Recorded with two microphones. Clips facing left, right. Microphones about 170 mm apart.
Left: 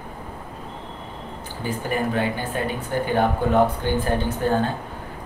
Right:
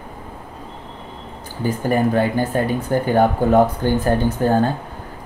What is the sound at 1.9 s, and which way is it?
Speech, 40° right (ahead or behind).